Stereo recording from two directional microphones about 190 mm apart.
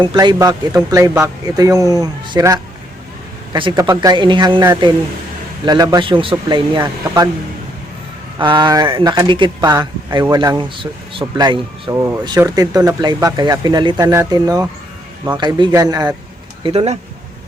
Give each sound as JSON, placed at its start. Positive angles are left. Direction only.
{"t": 0.0, "sound": "speech", "side_deg": -25}
{"t": 8.4, "sound": "speech", "side_deg": -25}
{"t": 16.6, "sound": "speech", "side_deg": -35}